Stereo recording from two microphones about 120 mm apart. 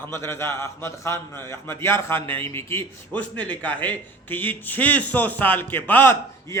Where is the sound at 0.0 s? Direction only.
25° left (ahead or behind).